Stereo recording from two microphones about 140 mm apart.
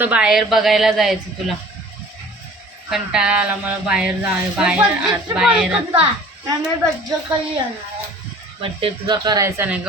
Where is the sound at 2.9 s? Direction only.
5° right (ahead or behind).